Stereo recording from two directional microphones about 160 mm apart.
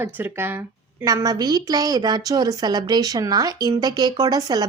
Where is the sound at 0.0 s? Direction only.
15° right (ahead or behind).